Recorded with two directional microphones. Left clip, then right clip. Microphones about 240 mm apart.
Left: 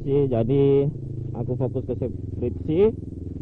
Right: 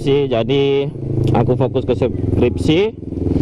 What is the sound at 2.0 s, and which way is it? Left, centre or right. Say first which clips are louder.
Speech: right 13 dB; centre.